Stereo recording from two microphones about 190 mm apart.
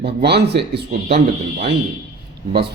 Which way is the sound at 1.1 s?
30° right (ahead or behind).